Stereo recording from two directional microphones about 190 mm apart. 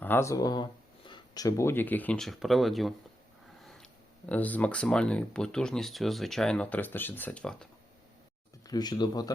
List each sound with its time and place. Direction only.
0.0 s speech: 10° left (ahead or behind)
4.3 s speech: 10° left (ahead or behind)
8.6 s speech: 20° left (ahead or behind)